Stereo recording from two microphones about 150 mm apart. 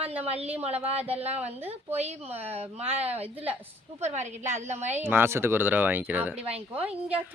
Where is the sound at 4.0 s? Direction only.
50° right (ahead or behind).